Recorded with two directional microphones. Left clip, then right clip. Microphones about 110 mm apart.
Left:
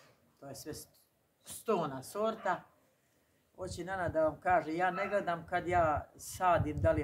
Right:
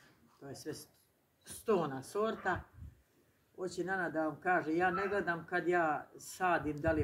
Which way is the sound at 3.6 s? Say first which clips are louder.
Right 1 dB; 20° left (ahead or behind).